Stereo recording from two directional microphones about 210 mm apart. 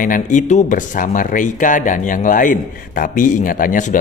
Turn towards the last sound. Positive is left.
turn(degrees=40)  # may be behind; listen again after turning